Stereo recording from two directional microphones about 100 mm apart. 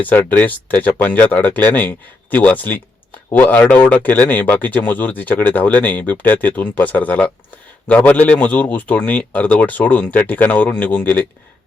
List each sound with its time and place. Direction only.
0.1 s speech: 15° left (ahead or behind)